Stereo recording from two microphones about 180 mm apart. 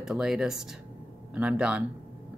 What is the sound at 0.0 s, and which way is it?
Speech, 5° right (ahead or behind).